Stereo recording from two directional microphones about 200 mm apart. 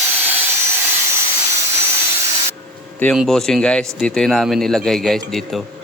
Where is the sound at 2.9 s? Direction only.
5° left (ahead or behind).